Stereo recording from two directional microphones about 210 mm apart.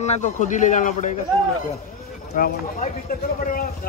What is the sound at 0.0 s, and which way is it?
Speech, 35° left (ahead or behind).